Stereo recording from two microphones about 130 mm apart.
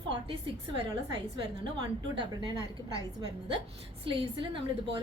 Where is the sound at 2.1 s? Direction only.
40° right (ahead or behind).